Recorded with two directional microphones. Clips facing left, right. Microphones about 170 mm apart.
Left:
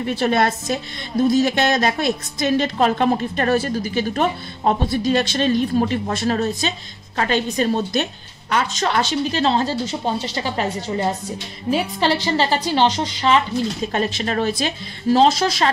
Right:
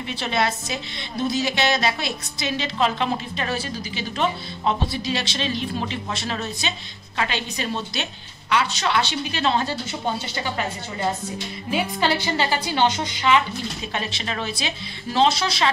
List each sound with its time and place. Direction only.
0.0 s a woman's voice: 50° left (ahead or behind)
11.7 s a woman's voice: 35° left (ahead or behind)